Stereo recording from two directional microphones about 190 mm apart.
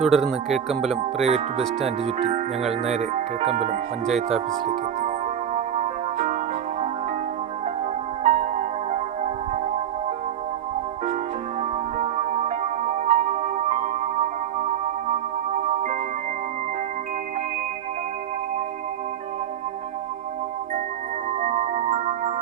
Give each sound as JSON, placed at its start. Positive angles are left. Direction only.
{"t": 0.0, "sound": "speech", "side_deg": 0}
{"t": 1.2, "sound": "speech", "side_deg": -30}
{"t": 4.0, "sound": "speech", "side_deg": 0}
{"t": 4.4, "sound": "speech", "side_deg": -45}
{"t": 5.5, "sound": "music", "side_deg": -35}
{"t": 8.2, "sound": "music", "side_deg": -35}
{"t": 11.9, "sound": "music", "side_deg": -35}
{"t": 21.4, "sound": "music", "side_deg": -35}